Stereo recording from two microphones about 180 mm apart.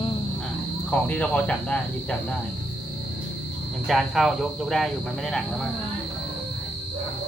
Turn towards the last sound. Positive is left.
turn(degrees=5)  # may be behind; listen again after turning